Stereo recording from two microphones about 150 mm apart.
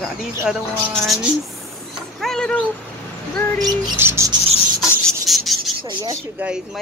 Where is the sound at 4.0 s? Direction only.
15° right (ahead or behind).